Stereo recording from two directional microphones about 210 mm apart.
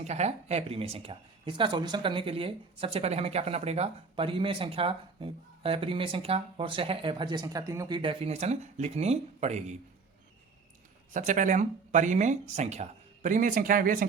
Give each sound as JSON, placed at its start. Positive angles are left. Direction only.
{"t": 0.0, "sound": "speech", "side_deg": -30}
{"t": 11.1, "sound": "speech", "side_deg": -35}